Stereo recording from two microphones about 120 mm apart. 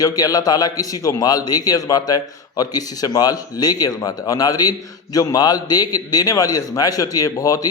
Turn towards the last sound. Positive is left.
turn(degrees=30)  # may be behind; listen again after turning